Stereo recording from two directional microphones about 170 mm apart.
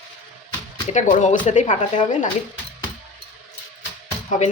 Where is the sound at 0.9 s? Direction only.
45° left (ahead or behind).